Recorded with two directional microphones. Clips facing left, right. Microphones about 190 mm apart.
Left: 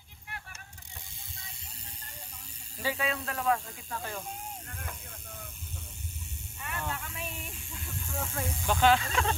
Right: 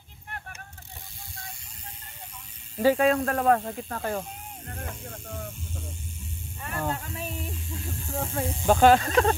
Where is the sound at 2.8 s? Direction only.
45° right (ahead or behind).